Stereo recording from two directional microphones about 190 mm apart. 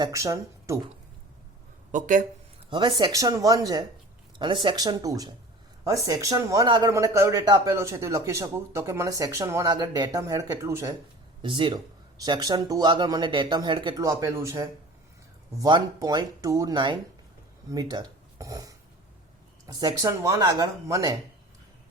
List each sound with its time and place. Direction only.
0.0 s speech: 15° right (ahead or behind)
1.9 s speech: 40° right (ahead or behind)
2.6 s a man's voice: 25° right (ahead or behind)
11.4 s a man's voice: 25° right (ahead or behind)